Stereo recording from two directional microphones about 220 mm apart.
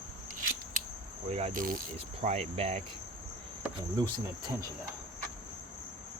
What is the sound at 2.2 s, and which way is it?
Cricket, 30° right (ahead or behind).